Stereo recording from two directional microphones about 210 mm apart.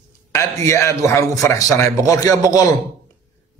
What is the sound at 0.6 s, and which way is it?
A man's voice, 15° left (ahead or behind).